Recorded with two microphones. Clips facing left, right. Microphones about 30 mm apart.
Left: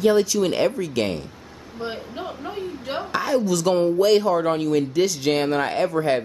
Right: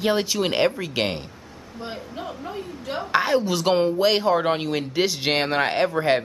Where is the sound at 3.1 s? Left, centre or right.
Right.